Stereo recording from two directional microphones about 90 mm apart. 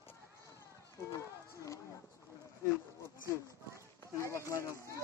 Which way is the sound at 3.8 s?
35° left (ahead or behind).